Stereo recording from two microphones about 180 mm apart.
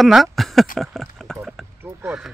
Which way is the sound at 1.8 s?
10° right (ahead or behind).